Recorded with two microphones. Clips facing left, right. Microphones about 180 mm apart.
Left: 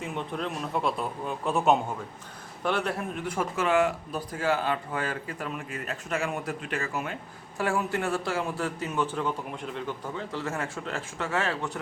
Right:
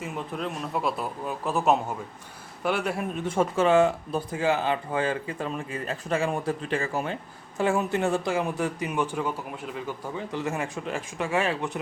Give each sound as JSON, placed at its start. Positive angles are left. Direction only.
{"t": 0.0, "sound": "a man's voice", "side_deg": 0}
{"t": 3.2, "sound": "a man's voice", "side_deg": -30}